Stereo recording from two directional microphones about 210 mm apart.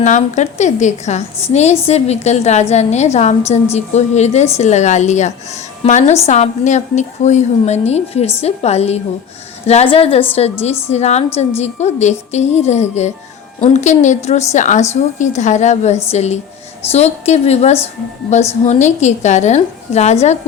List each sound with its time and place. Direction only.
0.0 s a woman's voice: 35° left (ahead or behind)